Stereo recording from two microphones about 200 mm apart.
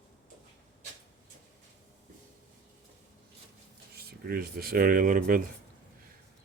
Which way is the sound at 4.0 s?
50° right (ahead or behind).